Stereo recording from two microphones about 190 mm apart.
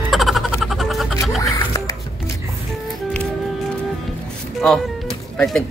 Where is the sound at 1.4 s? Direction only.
15° left (ahead or behind).